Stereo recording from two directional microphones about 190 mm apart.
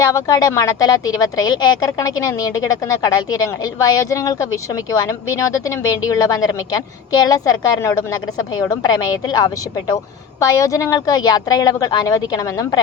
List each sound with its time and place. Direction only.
0.0 s a woman's voice: 20° left (ahead or behind)